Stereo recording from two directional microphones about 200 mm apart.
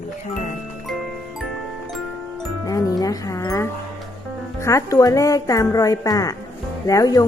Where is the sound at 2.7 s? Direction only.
15° left (ahead or behind).